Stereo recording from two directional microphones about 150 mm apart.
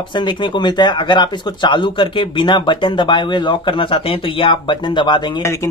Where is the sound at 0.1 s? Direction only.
30° left (ahead or behind).